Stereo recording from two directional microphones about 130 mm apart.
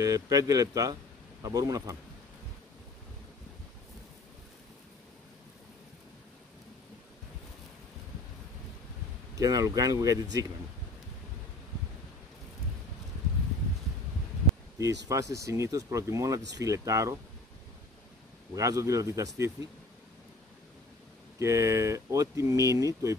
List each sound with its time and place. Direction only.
0.0 s speech: 25° right (ahead or behind)
9.3 s speech: 25° right (ahead or behind)
14.8 s speech: 25° right (ahead or behind)
18.5 s speech: 25° right (ahead or behind)
21.4 s speech: 25° right (ahead or behind)